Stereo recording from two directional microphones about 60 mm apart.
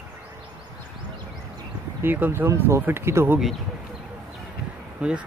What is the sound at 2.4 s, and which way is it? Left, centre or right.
Speech, right.